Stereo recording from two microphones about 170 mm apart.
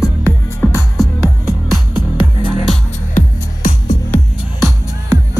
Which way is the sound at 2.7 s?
50° left (ahead or behind).